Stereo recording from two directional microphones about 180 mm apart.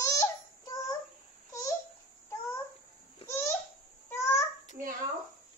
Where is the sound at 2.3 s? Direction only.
15° left (ahead or behind).